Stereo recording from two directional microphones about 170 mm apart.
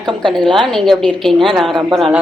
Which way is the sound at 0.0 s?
25° right (ahead or behind).